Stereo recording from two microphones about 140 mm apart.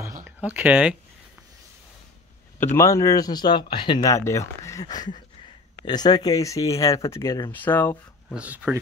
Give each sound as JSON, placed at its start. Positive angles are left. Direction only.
{"t": 0.0, "sound": "a sound", "side_deg": -20}
{"t": 2.6, "sound": "speech", "side_deg": 20}
{"t": 4.1, "sound": "speech", "side_deg": 20}
{"t": 7.5, "sound": "speech", "side_deg": 15}
{"t": 8.3, "sound": "speech", "side_deg": -5}